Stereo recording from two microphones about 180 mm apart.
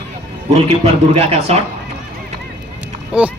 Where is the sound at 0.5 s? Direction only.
35° right (ahead or behind).